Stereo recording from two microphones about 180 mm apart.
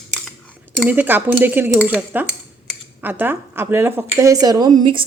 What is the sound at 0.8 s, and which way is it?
Speech, 10° right (ahead or behind).